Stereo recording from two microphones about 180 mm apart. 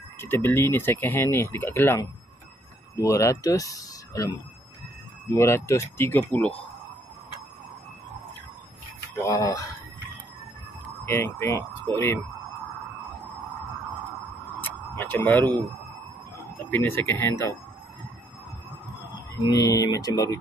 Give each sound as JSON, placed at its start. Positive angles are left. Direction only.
{"t": 0.2, "sound": "speech", "side_deg": 10}
{"t": 5.3, "sound": "speech", "side_deg": 15}
{"t": 9.1, "sound": "speech", "side_deg": 15}
{"t": 11.1, "sound": "speech", "side_deg": 15}
{"t": 14.6, "sound": "tick-tock", "side_deg": 10}
{"t": 16.7, "sound": "speech", "side_deg": 10}
{"t": 19.4, "sound": "speech", "side_deg": 20}